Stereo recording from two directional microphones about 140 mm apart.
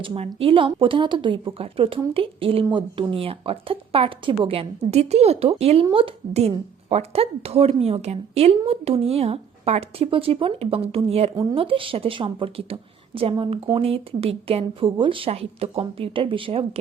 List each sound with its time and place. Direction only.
0.0 s speech: 40° right (ahead or behind)